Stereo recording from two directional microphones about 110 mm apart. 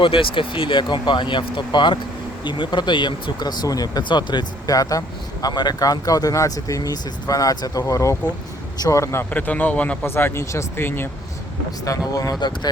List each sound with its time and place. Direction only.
0.0 s speech: 50° left (ahead or behind); by 9.2 s 30° left (ahead or behind)
9.3 s speech: 15° left (ahead or behind)
11.9 s speech: 35° left (ahead or behind)